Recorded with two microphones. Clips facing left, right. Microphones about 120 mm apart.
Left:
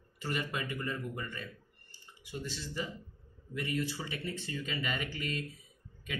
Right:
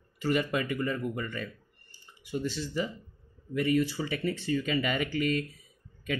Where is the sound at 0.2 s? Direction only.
80° right.